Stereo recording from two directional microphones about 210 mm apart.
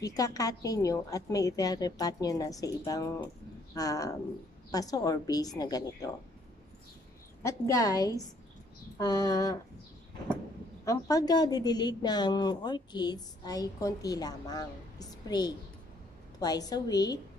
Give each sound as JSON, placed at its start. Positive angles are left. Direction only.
{"t": 0.0, "sound": "a woman's voice", "side_deg": 15}
{"t": 7.4, "sound": "a woman's voice", "side_deg": 15}
{"t": 10.9, "sound": "a woman's voice", "side_deg": 15}